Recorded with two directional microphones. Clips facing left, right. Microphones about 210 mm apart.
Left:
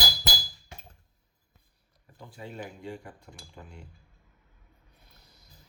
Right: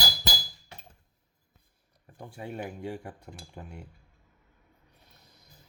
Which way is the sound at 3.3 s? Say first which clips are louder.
Right 4 dB; 40° right (ahead or behind).